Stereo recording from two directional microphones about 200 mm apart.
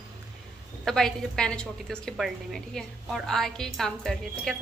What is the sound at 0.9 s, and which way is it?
A woman's voice, 5° left (ahead or behind).